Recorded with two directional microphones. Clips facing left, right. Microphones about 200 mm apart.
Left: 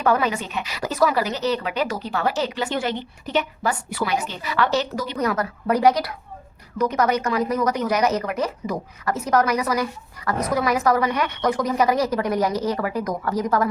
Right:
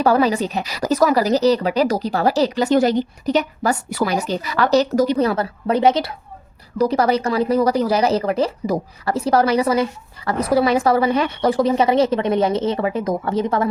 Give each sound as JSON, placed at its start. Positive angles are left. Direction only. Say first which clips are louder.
{"t": 0.0, "sound": "speech", "louder": "right 5 dB", "side_deg": -35}
{"t": 5.1, "sound": "speech", "louder": "right 5 dB", "side_deg": -30}